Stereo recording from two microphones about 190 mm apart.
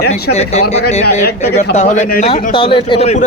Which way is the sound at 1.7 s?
40° left (ahead or behind).